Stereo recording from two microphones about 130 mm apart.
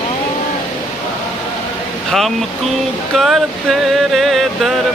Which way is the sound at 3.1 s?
Centre (ahead or behind).